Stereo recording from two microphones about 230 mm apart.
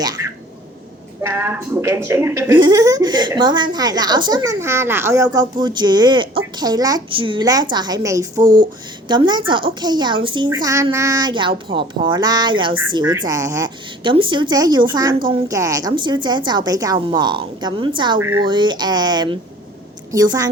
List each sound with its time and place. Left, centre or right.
1.2 s a woman's voice: centre